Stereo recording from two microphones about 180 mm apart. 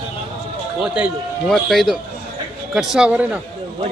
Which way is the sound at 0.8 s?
5° right (ahead or behind).